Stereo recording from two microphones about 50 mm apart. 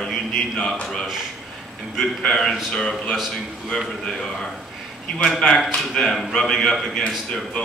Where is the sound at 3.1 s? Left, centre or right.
Centre.